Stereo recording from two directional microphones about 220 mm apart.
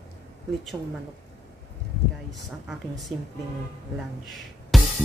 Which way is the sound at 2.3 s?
Centre (ahead or behind).